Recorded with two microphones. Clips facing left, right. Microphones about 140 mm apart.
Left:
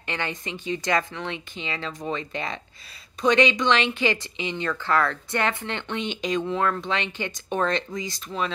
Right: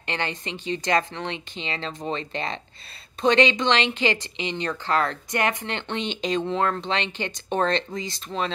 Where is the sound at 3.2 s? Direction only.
25° right (ahead or behind).